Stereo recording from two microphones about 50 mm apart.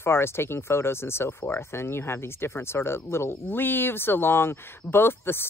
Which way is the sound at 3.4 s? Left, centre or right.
Left.